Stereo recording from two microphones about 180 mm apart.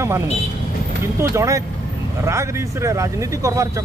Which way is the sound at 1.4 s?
15° right (ahead or behind).